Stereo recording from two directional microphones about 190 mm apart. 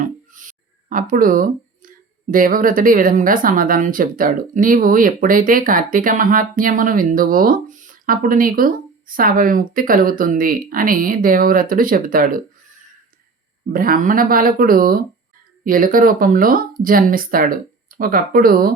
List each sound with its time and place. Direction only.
0.9 s speech: 45° right (ahead or behind)
13.7 s speech: 50° right (ahead or behind)